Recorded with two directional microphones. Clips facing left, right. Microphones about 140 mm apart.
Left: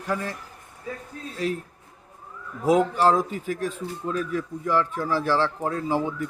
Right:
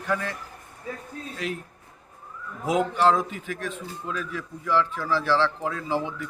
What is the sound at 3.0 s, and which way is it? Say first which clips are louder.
A man's voice: left 1 dB; 40° left (ahead or behind).